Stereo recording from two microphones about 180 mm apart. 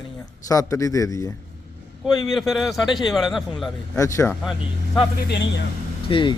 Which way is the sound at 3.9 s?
15° left (ahead or behind).